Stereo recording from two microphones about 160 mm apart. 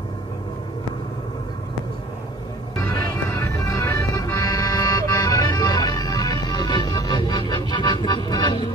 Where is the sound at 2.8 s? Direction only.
15° left (ahead or behind).